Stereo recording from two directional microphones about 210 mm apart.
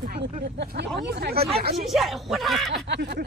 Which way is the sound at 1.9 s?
Centre (ahead or behind).